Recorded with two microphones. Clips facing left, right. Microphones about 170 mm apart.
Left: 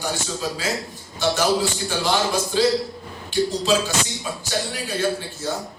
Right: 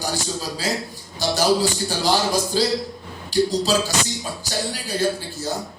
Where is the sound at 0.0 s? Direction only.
35° right (ahead or behind).